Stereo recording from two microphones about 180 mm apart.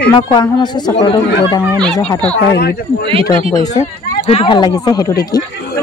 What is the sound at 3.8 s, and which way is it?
Speech, 30° left (ahead or behind).